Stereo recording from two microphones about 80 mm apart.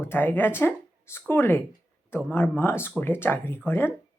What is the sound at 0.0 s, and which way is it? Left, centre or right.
Speech, left.